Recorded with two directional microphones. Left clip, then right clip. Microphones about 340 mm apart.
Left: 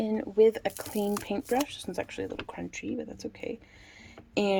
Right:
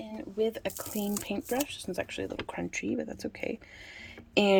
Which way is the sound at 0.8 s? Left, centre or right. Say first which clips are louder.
Left 4 dB; centre.